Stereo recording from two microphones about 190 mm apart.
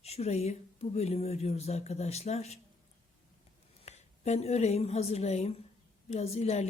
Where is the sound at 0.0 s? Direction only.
35° left (ahead or behind).